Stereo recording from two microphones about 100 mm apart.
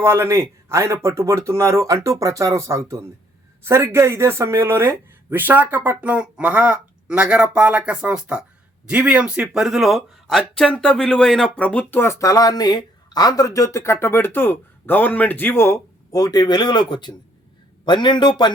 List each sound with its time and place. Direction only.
0.0 s speech: 25° right (ahead or behind); by 11.9 s 15° left (ahead or behind)
11.9 s speech: 30° left (ahead or behind)
16.1 s speech: 40° left (ahead or behind)